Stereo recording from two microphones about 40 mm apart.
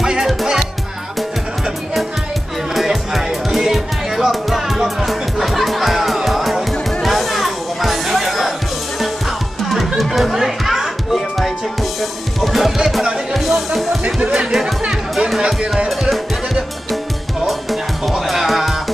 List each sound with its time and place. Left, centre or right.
0.0 s music: centre
2.7 s music: centre
9.7 s music: centre
14.2 s music: right
14.5 s music: centre
17.5 s music: centre